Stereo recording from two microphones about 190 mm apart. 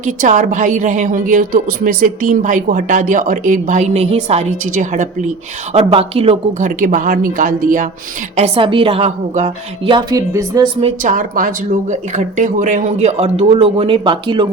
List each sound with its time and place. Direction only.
0.0 s a woman's voice: 40° right (ahead or behind)
8.4 s a woman's voice: 30° right (ahead or behind)
9.9 s a woman's voice: 20° right (ahead or behind)
10.8 s speech: 35° right (ahead or behind)